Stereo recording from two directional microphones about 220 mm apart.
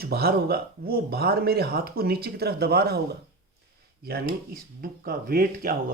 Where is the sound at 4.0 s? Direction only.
45° right (ahead or behind).